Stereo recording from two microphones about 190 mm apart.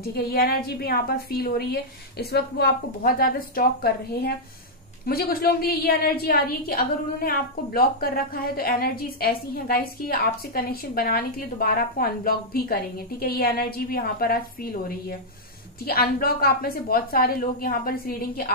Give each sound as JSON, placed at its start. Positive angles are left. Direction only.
{"t": 0.0, "sound": "a woman's voice", "side_deg": 55}